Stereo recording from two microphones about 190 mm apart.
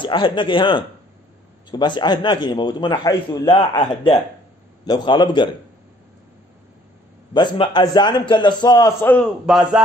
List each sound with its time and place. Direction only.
0.0 s a man's voice: 25° left (ahead or behind)
7.3 s a man's voice: 25° left (ahead or behind)
9.5 s a man's voice: 5° right (ahead or behind)